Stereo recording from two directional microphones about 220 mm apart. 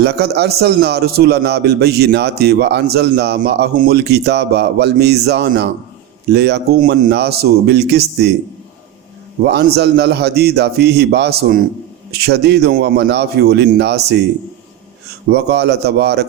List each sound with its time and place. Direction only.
0.0 s a man's voice: 50° right (ahead or behind)
9.5 s a man's voice: 45° right (ahead or behind)
15.3 s a man's voice: 50° right (ahead or behind)